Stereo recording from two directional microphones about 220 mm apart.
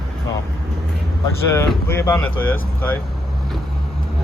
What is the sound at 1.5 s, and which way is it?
Speech, 10° left (ahead or behind).